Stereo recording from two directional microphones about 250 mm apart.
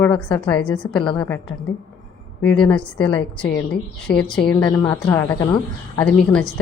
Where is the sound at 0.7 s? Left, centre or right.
Centre.